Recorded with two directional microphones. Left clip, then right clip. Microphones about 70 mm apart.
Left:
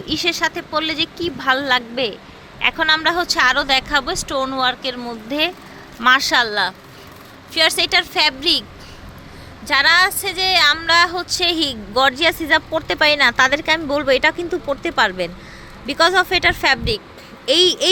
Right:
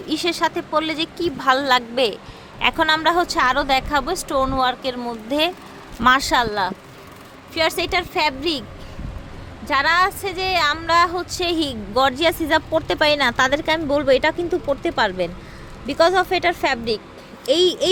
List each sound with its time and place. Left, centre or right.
0.0 s speech: right
2.6 s a woman's voice: right
5.3 s speech: right
6.0 s speech: right
6.5 s a woman's voice: centre
9.6 s a woman's voice: centre
12.1 s speech: right
13.8 s speech: centre